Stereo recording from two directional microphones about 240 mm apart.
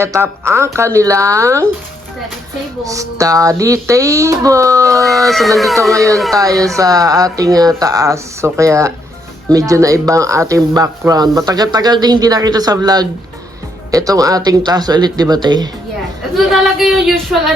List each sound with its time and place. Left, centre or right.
0.0 s speech: centre
2.8 s speech: centre
4.9 s speech: centre
5.9 s speech: centre
16.5 s speech: centre